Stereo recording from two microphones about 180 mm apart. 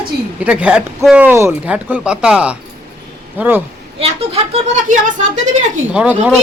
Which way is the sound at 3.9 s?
35° right (ahead or behind).